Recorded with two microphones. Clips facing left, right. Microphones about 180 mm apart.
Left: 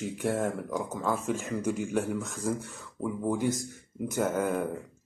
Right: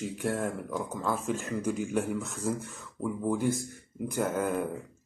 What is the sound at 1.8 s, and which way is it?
Speech, centre (ahead or behind).